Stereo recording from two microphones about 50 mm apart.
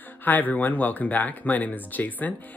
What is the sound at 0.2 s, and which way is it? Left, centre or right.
Speech, left.